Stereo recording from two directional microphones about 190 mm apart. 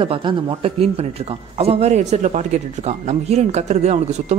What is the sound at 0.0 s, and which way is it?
Speech, 25° right (ahead or behind).